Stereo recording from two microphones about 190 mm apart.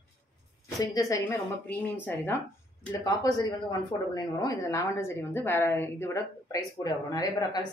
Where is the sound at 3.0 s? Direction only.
20° left (ahead or behind).